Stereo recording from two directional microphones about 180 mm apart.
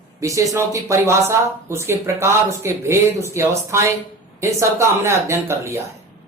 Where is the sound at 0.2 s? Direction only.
15° right (ahead or behind).